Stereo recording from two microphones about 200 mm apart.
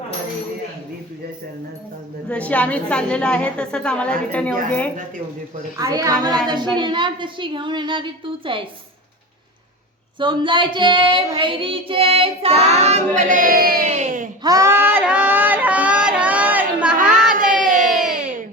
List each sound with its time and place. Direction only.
2.3 s a woman's voice: 5° left (ahead or behind)
5.8 s a woman's voice: 15° right (ahead or behind)
6.7 s child singing: 25° right (ahead or behind)
10.2 s child singing: 25° right (ahead or behind)
14.4 s a sound: 15° right (ahead or behind)
17.0 s a sound: 40° right (ahead or behind)